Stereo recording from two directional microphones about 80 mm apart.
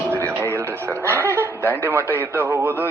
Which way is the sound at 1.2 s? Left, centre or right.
Left.